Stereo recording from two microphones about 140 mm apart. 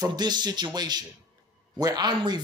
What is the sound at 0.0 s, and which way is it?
A man's voice, 30° right (ahead or behind).